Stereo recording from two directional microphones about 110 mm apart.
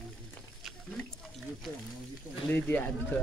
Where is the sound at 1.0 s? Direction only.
Centre (ahead or behind).